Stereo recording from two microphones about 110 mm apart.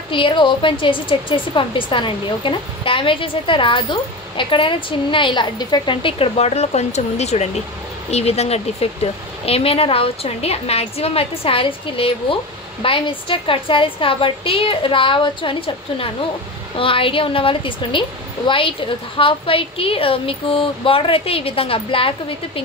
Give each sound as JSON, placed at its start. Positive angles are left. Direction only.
{"t": 0.1, "sound": "speech", "side_deg": 50}
{"t": 6.0, "sound": "speech", "side_deg": 60}
{"t": 8.1, "sound": "speech", "side_deg": 70}